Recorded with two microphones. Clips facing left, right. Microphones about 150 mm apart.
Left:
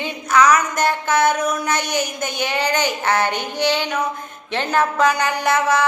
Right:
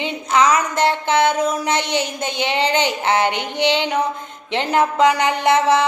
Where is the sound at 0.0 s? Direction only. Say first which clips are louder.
Even; 25° right (ahead or behind).